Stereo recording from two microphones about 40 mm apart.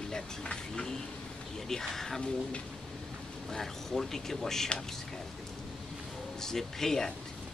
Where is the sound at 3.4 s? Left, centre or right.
Centre.